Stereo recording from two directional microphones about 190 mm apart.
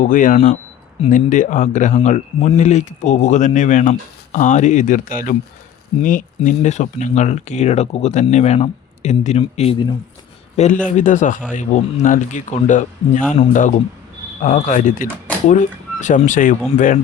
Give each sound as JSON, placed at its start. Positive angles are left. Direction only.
{"t": 0.0, "sound": "speech", "side_deg": 45}
{"t": 10.8, "sound": "speech", "side_deg": 40}